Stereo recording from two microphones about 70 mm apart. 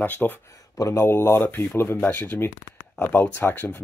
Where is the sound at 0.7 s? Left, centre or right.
Left.